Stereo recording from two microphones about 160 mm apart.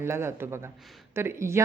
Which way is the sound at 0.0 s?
15° right (ahead or behind).